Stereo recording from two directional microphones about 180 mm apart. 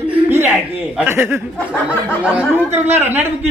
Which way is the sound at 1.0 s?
10° right (ahead or behind).